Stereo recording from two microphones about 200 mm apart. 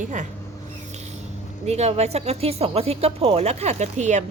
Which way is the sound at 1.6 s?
35° right (ahead or behind).